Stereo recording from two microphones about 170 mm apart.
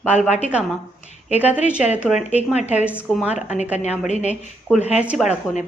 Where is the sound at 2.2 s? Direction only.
40° left (ahead or behind).